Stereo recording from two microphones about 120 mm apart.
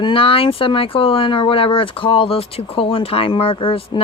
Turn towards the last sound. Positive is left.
turn(degrees=45)  # may be behind; listen again after turning